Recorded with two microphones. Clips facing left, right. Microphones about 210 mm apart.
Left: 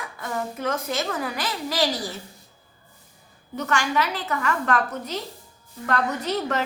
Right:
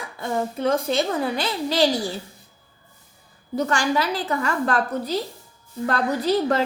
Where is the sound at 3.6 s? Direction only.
30° right (ahead or behind).